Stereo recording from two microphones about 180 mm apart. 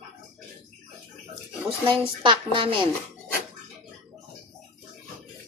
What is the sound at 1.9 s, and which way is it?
Speech, 30° right (ahead or behind).